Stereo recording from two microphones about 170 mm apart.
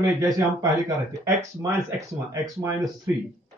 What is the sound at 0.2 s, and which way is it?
Speech, 20° right (ahead or behind).